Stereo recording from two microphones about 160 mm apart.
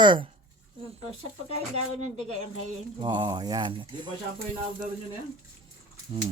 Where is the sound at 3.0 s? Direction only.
30° right (ahead or behind).